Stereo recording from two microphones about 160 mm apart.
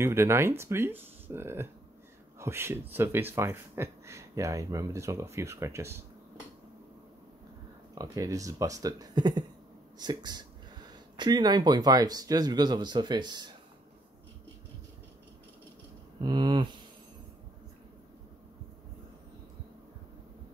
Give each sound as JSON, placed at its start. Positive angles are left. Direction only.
{"t": 0.0, "sound": "speech", "side_deg": -15}
{"t": 7.9, "sound": "speech", "side_deg": -25}
{"t": 16.2, "sound": "speech", "side_deg": -30}